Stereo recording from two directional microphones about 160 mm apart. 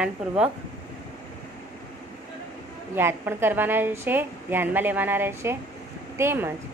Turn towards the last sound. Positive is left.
turn(degrees=-15)  # may be behind; listen again after turning